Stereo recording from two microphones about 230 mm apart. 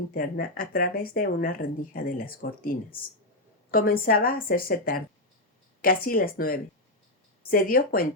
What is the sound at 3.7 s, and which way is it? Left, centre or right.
A woman's voice, left.